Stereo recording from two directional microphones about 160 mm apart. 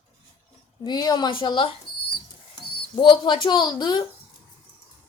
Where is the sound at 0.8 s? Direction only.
25° left (ahead or behind).